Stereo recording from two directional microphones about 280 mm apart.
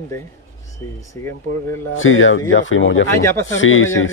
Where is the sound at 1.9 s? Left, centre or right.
Left.